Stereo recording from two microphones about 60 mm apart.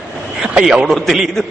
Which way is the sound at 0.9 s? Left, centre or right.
Centre.